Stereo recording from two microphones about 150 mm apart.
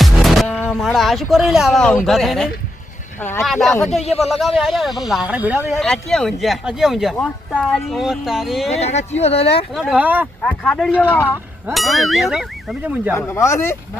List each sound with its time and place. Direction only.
0.0 s music: centre (ahead or behind)
0.7 s speech: centre (ahead or behind)
3.2 s speech: 15° left (ahead or behind)
3.4 s speech: centre (ahead or behind)
4.0 s speech: 45° left (ahead or behind)
4.3 s speech: centre (ahead or behind)
5.8 s speech: 5° left (ahead or behind)
8.7 s speech: 45° left (ahead or behind)
9.9 s speech: 10° right (ahead or behind)
10.4 s speech: 5° left (ahead or behind); by 13.1 s 10° right (ahead or behind)
13.1 s speech: 20° left (ahead or behind)